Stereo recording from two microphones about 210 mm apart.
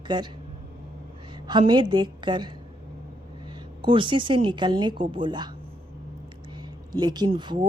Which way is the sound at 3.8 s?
25° right (ahead or behind).